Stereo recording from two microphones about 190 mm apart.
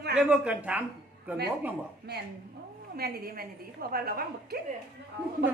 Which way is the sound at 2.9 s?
55° right (ahead or behind).